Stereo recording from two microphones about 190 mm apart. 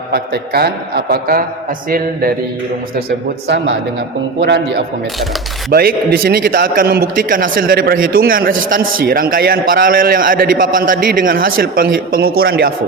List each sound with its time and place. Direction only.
0.1 s a man's voice: 55° right (ahead or behind)
3.4 s a man's voice: 65° right (ahead or behind)